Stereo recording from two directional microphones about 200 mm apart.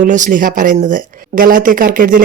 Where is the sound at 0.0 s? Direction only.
40° right (ahead or behind).